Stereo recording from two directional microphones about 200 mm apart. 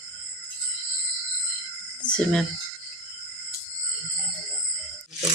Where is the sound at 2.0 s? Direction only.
5° left (ahead or behind).